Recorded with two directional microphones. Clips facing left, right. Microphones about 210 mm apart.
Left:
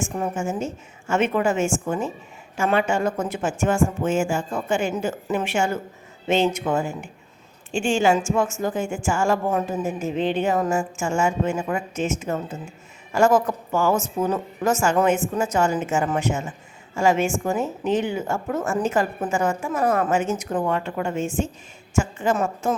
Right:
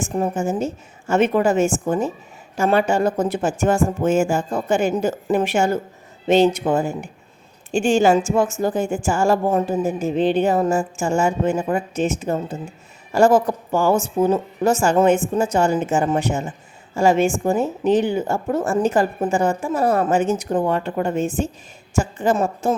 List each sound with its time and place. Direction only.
0.0 s a woman's voice: 35° right (ahead or behind)